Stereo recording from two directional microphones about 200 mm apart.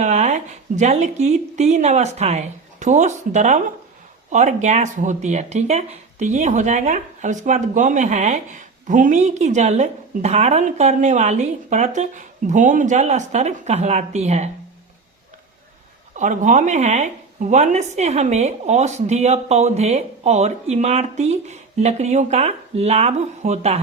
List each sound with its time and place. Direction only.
0.0 s speech: 35° right (ahead or behind)
16.1 s speech: 40° right (ahead or behind)